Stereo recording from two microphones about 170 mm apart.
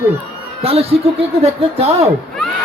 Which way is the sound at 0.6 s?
35° right (ahead or behind).